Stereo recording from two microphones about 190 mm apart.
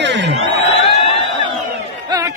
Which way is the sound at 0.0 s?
70° right (ahead or behind).